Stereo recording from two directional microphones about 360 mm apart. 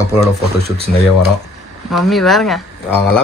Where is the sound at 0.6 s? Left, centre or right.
Centre.